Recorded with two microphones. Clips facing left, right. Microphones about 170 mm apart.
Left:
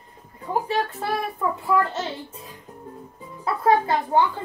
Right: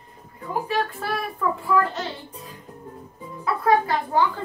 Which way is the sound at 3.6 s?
25° left (ahead or behind).